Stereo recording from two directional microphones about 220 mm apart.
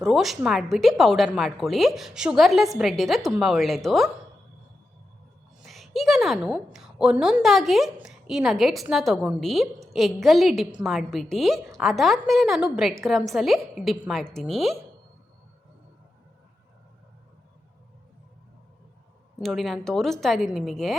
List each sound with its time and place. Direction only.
0.0 s a woman's voice: centre (ahead or behind)
5.6 s a woman's voice: centre (ahead or behind)
19.4 s a woman's voice: centre (ahead or behind)